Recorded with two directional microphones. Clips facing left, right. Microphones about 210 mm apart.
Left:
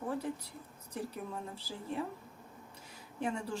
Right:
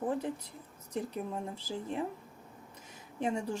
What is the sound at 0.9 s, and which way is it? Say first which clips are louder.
Speech: right 4 dB; 20° right (ahead or behind).